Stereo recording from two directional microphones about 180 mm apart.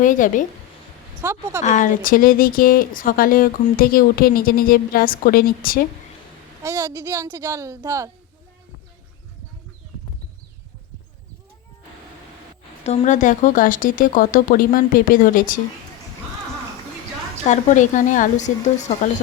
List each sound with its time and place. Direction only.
0.0 s speech: 45° left (ahead or behind)
1.2 s a woman's voice: 15° right (ahead or behind)
1.6 s speech: 45° left (ahead or behind)
6.6 s a woman's voice: 15° right (ahead or behind)
12.8 s speech: 35° left (ahead or behind)
17.5 s speech: 45° left (ahead or behind)